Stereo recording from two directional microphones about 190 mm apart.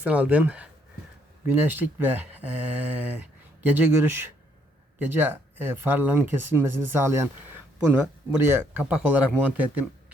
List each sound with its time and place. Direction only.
0.0 s speech: 10° right (ahead or behind)